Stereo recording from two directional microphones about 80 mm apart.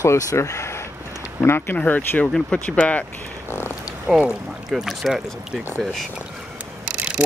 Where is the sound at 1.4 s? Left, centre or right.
Left.